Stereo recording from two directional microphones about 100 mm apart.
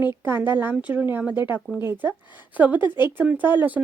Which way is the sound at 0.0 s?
25° right (ahead or behind).